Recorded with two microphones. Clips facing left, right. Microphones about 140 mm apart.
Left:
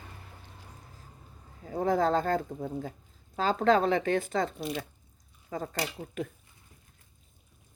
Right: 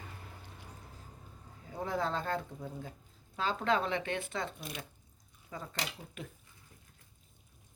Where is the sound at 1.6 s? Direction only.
45° left (ahead or behind).